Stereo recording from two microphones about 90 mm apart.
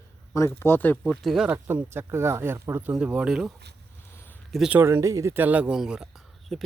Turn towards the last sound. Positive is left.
turn(degrees=0)  # may be behind; listen again after turning